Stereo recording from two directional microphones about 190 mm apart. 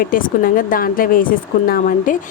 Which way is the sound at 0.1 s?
45° left (ahead or behind).